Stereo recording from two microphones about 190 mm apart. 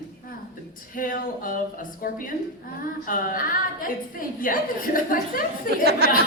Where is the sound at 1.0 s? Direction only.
45° left (ahead or behind).